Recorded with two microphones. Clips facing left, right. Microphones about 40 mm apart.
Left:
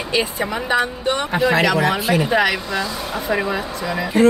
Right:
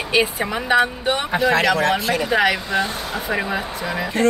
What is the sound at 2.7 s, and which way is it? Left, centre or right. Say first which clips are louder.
Speech: right 1 dB; right.